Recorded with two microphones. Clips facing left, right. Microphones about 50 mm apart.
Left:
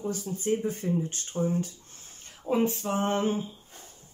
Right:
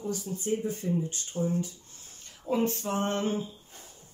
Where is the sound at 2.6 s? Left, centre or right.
Centre.